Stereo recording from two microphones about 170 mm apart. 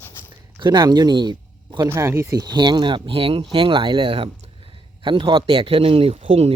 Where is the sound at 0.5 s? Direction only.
25° right (ahead or behind).